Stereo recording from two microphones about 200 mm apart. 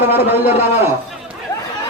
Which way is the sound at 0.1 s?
10° right (ahead or behind).